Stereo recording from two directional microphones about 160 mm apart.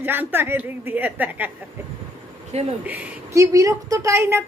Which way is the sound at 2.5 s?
40° right (ahead or behind).